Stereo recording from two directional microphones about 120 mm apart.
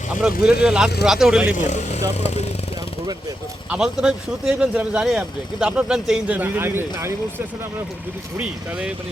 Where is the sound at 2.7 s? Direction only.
30° right (ahead or behind).